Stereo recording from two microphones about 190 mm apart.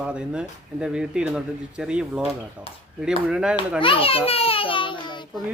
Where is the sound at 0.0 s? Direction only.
5° right (ahead or behind).